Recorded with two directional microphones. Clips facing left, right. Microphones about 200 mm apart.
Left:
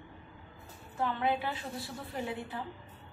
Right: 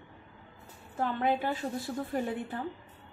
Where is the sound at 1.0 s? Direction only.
45° right (ahead or behind).